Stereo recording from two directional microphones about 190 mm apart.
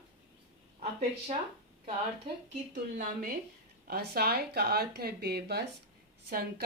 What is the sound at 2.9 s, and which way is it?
Speech, 45° right (ahead or behind).